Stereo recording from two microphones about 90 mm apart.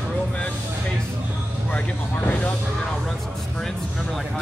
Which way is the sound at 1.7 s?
20° left (ahead or behind).